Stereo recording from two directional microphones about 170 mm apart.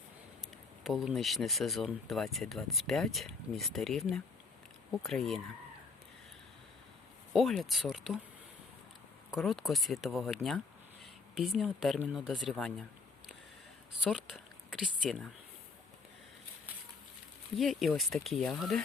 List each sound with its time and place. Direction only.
0.9 s speech: centre (ahead or behind)
7.3 s speech: centre (ahead or behind)
9.3 s speech: centre (ahead or behind)
14.7 s speech: 5° right (ahead or behind)
17.6 s speech: centre (ahead or behind)